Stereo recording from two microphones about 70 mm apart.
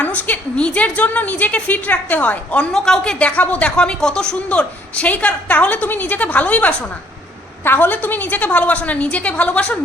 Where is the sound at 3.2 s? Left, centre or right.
Centre.